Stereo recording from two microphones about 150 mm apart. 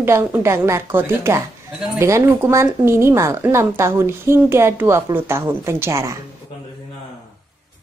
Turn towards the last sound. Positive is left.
turn(degrees=-20)  # may be behind; listen again after turning